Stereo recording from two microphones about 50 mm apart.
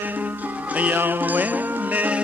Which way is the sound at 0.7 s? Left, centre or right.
Right.